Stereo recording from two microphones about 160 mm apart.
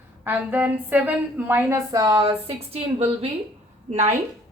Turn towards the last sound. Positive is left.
turn(degrees=-45)  # may be behind; listen again after turning